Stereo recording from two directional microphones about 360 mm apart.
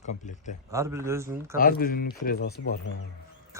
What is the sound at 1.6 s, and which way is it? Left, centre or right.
Speech, left.